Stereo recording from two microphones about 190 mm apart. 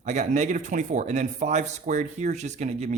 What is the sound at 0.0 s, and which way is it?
A man's voice, 40° right (ahead or behind).